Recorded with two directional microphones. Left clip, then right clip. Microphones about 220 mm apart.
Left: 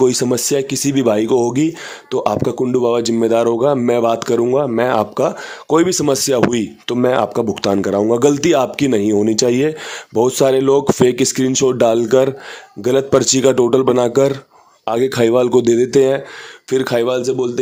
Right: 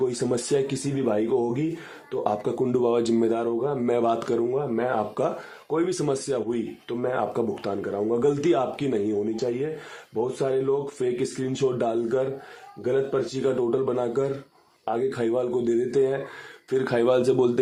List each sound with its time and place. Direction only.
0.0 s speech: 35° left (ahead or behind)
4.5 s speech: 55° left (ahead or behind)
5.9 s speech: 35° left (ahead or behind)
9.2 s speech: 45° left (ahead or behind); by 17.6 s 15° left (ahead or behind)